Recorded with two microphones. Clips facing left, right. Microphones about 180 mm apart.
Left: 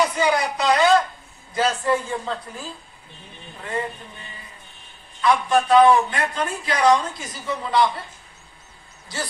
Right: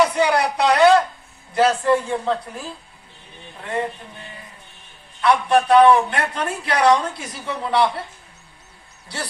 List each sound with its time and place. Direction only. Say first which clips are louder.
0.0 s a sound: right 3 dB; 65° right (ahead or behind)
1.5 s a man's voice: right 4 dB; 65° right (ahead or behind)
5.2 s a man's voice: right 2 dB; 65° right (ahead or behind)